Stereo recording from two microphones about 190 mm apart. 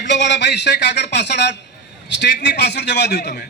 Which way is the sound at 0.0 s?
65° left (ahead or behind).